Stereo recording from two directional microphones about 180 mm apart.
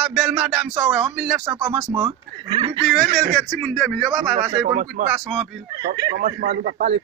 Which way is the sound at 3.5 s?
5° left (ahead or behind).